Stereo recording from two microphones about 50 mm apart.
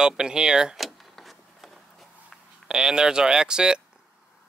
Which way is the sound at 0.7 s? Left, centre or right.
Centre.